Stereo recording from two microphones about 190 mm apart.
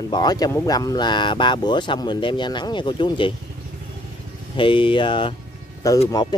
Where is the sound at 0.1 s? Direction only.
20° left (ahead or behind).